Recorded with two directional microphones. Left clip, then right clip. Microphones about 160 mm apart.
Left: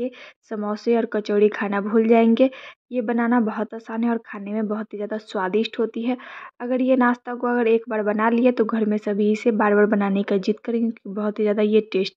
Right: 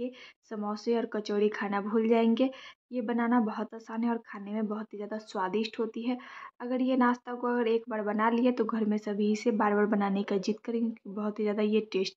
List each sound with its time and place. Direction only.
0.0 s speech: 35° left (ahead or behind)